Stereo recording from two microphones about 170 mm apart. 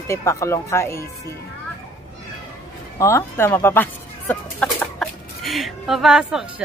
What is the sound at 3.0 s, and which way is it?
Speech, 15° left (ahead or behind).